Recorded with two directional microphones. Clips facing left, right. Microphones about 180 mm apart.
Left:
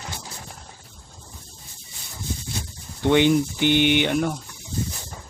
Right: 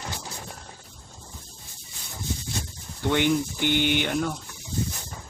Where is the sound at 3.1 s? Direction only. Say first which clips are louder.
Left 5 dB; 20° left (ahead or behind).